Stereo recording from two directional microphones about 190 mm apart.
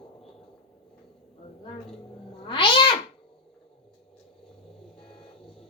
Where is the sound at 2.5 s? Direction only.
25° left (ahead or behind).